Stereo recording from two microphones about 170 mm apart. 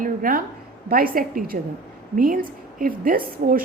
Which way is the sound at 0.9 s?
60° right (ahead or behind).